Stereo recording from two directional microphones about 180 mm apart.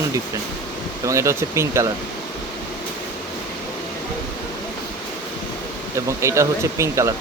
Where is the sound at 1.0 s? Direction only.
15° right (ahead or behind).